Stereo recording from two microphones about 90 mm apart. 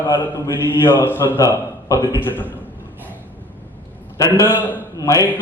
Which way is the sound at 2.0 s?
25° right (ahead or behind).